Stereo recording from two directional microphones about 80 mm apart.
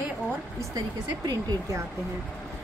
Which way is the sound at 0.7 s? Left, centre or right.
Right.